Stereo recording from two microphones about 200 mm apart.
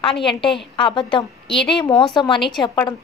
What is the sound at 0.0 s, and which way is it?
A woman's voice, 25° left (ahead or behind).